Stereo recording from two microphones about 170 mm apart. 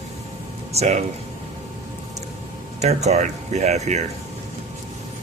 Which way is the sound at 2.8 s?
40° right (ahead or behind).